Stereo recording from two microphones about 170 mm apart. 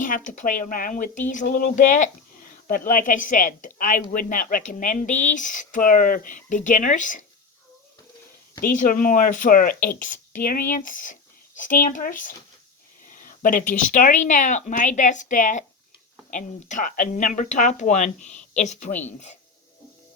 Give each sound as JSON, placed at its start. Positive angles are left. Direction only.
{"t": 0.0, "sound": "speech", "side_deg": 50}
{"t": 8.6, "sound": "speech", "side_deg": 50}